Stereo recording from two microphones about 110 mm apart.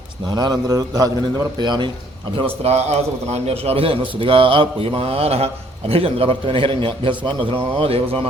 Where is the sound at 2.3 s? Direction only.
60° right (ahead or behind).